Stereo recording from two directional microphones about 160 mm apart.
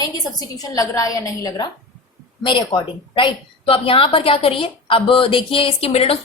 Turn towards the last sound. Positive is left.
turn(degrees=35)  # may be behind; listen again after turning